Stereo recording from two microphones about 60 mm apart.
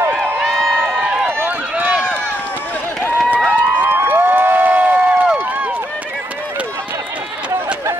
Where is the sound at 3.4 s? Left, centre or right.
Right.